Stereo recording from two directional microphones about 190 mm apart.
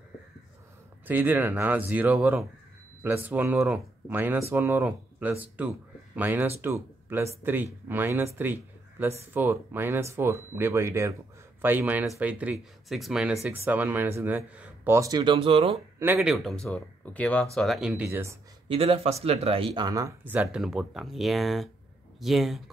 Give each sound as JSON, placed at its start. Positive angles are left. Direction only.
{"t": 1.0, "sound": "speech", "side_deg": -10}
{"t": 16.0, "sound": "speech", "side_deg": -5}
{"t": 18.7, "sound": "speech", "side_deg": -30}
{"t": 20.5, "sound": "speech", "side_deg": -5}